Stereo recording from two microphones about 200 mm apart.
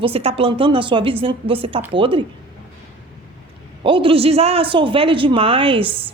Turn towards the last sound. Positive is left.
turn(degrees=-25)  # may be behind; listen again after turning